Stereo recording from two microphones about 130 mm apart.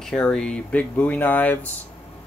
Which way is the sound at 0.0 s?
5° left (ahead or behind).